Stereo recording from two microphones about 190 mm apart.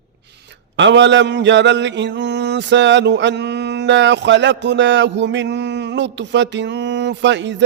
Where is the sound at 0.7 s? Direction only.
70° right (ahead or behind).